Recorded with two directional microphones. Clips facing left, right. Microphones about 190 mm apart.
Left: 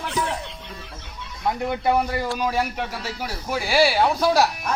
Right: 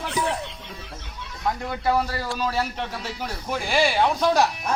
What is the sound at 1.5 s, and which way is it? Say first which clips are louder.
Speech: left 2 dB; 20° left (ahead or behind).